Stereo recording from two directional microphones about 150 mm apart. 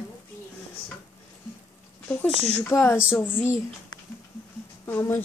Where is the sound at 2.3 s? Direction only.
40° left (ahead or behind).